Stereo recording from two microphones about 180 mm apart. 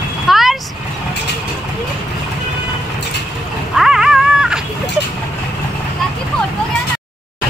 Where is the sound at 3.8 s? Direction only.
5° right (ahead or behind).